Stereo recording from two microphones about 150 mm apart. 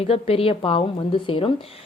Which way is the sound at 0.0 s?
40° left (ahead or behind).